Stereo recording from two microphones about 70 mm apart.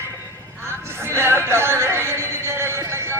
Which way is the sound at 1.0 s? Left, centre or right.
Right.